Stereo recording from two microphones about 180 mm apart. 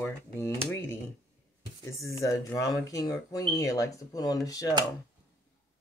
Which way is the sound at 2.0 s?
15° left (ahead or behind).